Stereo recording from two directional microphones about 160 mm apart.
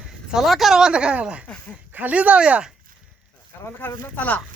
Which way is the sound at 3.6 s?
15° left (ahead or behind).